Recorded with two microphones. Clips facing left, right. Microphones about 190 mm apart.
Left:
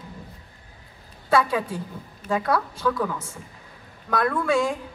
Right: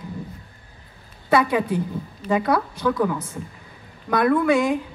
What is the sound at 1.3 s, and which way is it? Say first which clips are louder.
A woman's voice: right 3 dB; 20° right (ahead or behind).